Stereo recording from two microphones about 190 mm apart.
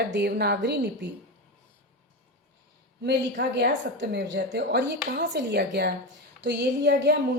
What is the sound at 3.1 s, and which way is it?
A woman's voice, 60° right (ahead or behind).